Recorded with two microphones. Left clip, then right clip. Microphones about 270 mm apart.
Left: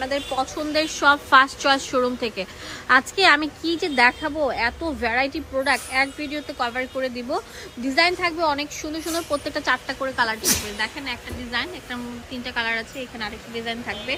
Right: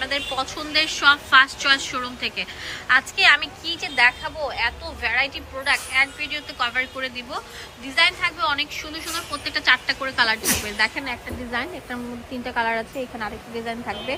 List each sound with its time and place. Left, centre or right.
0.0 s a woman's voice: centre